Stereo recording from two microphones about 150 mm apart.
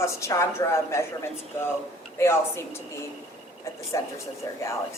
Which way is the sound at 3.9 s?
20° left (ahead or behind).